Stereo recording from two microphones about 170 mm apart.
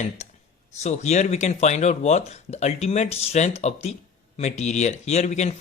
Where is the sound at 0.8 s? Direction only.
40° left (ahead or behind).